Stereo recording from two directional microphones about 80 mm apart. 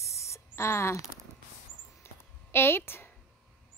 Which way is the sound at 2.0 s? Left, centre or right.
Left.